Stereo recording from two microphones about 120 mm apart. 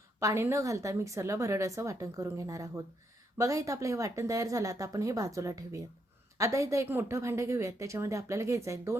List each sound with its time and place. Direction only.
0.2 s speech: 25° right (ahead or behind)